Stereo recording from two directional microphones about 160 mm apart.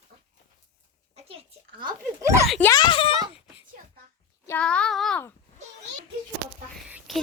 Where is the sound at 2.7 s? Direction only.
30° left (ahead or behind).